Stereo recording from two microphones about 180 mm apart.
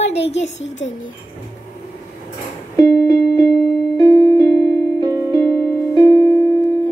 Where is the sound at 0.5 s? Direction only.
90° left.